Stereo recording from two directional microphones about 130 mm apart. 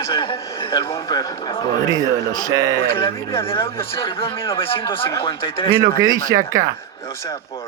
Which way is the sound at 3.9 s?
45° left (ahead or behind).